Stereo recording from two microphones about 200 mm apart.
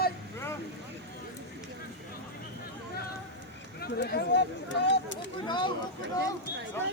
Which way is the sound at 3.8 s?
50° left (ahead or behind).